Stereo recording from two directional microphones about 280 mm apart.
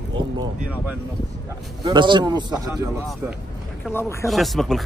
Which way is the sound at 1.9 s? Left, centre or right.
Centre.